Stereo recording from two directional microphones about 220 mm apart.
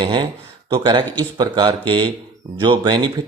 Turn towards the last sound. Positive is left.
turn(degrees=-20)  # may be behind; listen again after turning